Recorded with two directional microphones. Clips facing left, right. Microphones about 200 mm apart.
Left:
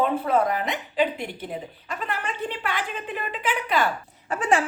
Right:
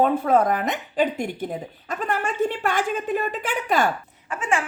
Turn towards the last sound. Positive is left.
turn(degrees=35)  # may be behind; listen again after turning